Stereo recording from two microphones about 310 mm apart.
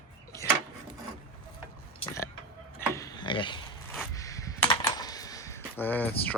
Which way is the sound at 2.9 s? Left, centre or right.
Centre.